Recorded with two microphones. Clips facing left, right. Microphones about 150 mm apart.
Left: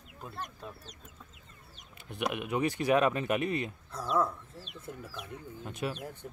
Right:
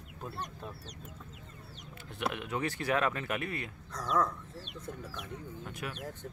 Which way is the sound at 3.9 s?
10° left (ahead or behind).